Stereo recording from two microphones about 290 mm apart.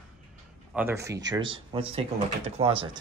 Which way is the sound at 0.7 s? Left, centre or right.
Centre.